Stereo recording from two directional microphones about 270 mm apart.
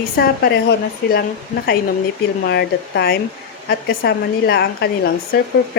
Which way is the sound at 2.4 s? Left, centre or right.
Left.